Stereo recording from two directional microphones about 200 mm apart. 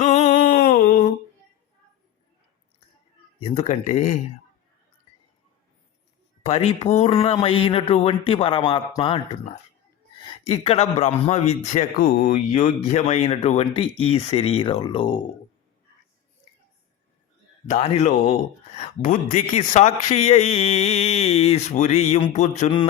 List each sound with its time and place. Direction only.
0.0 s a sound: 35° left (ahead or behind)
3.4 s speech: 30° left (ahead or behind)
6.4 s speech: 30° left (ahead or behind)
10.4 s speech: 30° left (ahead or behind)
17.7 s speech: 35° left (ahead or behind)